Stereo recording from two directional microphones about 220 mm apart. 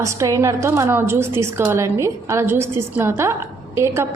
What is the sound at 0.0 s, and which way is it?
A woman's voice, 15° right (ahead or behind).